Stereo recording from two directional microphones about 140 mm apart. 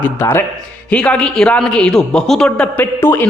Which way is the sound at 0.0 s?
15° left (ahead or behind).